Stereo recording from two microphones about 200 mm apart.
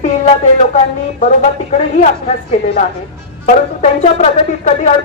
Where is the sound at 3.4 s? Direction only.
35° left (ahead or behind).